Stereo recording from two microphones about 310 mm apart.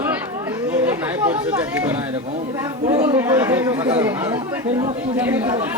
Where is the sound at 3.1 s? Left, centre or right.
Centre.